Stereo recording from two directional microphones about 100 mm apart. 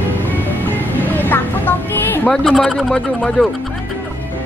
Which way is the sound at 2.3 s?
5° left (ahead or behind).